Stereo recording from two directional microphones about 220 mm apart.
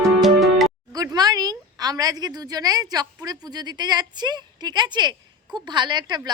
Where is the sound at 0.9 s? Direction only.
15° right (ahead or behind).